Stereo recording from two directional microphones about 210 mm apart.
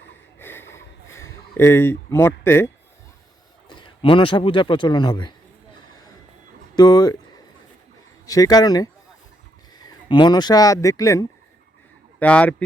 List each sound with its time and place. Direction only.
0.3 s a sound: 10° left (ahead or behind)
3.7 s a man's voice: 20° left (ahead or behind)
6.7 s speech: 20° left (ahead or behind)
8.3 s speech: 15° left (ahead or behind)